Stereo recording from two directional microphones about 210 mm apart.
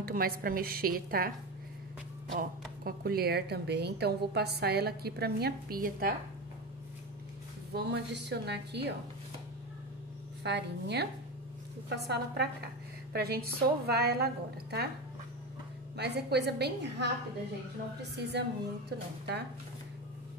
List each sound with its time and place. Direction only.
0.0 s speech: 45° right (ahead or behind)
2.3 s speech: 45° right (ahead or behind)
7.7 s speech: 55° right (ahead or behind)
10.4 s speech: 55° right (ahead or behind)
13.1 s speech: 45° right (ahead or behind)
16.0 s speech: 50° right (ahead or behind)
18.3 s speech: 55° right (ahead or behind)